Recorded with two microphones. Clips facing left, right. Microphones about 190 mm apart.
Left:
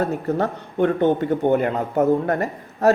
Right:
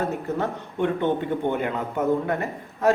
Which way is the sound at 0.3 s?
40° left (ahead or behind).